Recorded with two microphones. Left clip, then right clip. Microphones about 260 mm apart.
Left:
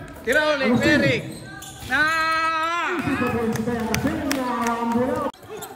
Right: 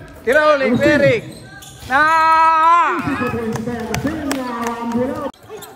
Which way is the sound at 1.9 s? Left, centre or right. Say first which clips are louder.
Right 8 dB; centre.